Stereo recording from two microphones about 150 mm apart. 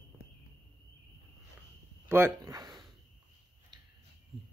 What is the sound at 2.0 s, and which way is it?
Speech, 15° right (ahead or behind).